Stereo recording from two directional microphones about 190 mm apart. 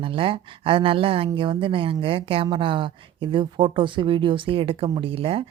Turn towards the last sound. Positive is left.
turn(degrees=-30)  # may be behind; listen again after turning